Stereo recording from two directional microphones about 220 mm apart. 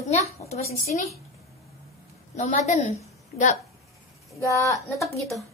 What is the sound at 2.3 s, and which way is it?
Speech, 35° left (ahead or behind).